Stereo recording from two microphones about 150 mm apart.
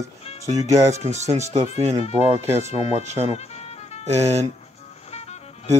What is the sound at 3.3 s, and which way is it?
Music, 45° left (ahead or behind).